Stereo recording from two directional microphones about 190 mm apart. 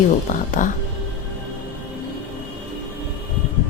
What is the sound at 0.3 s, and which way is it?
Speech, 45° left (ahead or behind).